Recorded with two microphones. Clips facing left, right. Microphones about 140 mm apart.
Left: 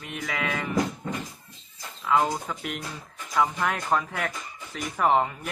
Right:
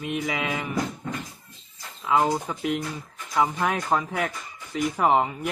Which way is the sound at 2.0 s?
15° right (ahead or behind).